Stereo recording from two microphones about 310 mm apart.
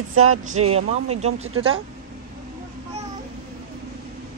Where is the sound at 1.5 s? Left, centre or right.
Right.